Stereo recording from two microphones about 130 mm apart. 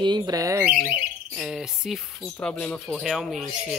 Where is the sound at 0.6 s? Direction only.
10° right (ahead or behind).